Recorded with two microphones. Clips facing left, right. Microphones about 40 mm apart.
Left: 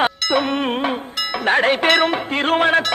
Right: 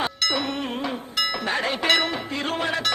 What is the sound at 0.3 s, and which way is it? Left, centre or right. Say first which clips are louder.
Music: left 8 dB; left.